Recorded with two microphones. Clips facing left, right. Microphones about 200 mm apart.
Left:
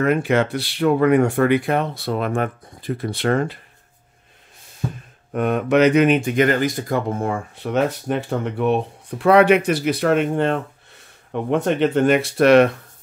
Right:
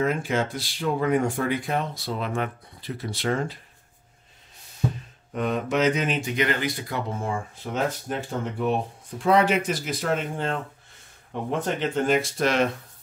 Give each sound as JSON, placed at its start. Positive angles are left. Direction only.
{"t": 0.0, "sound": "speech", "side_deg": 65}
{"t": 5.3, "sound": "speech", "side_deg": 55}